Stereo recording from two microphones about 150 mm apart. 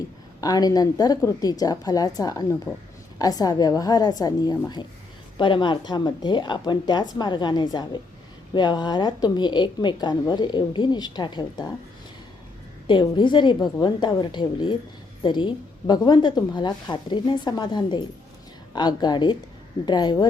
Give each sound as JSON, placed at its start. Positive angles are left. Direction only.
{"t": 0.4, "sound": "a woman's voice", "side_deg": 25}
{"t": 12.9, "sound": "a woman's voice", "side_deg": 30}